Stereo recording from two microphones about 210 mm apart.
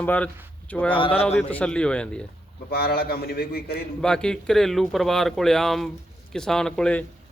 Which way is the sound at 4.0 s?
5° left (ahead or behind).